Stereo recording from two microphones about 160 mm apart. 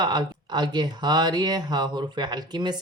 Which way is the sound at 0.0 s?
25° right (ahead or behind).